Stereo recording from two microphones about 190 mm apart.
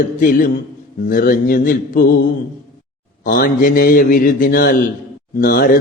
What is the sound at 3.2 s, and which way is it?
Speech, 50° left (ahead or behind).